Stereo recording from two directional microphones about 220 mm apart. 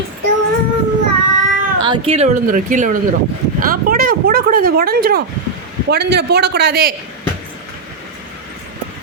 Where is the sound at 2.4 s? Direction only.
35° right (ahead or behind).